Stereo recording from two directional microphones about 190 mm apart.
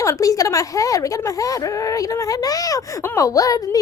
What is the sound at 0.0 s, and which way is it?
A woman's voice, 15° left (ahead or behind).